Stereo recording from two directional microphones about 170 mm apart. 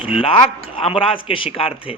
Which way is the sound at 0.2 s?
35° left (ahead or behind).